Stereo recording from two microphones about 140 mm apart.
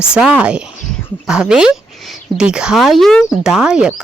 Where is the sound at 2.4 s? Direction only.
5° right (ahead or behind).